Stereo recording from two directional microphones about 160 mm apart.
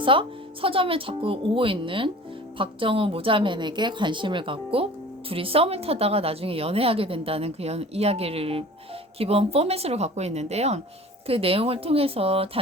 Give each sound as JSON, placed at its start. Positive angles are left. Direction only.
{"t": 0.0, "sound": "a woman's voice", "side_deg": -35}